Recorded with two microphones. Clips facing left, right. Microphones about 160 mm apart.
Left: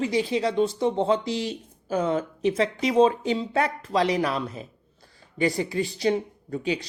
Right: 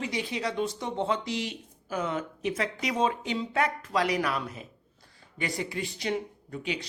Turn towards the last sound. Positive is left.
turn(degrees=35)  # may be behind; listen again after turning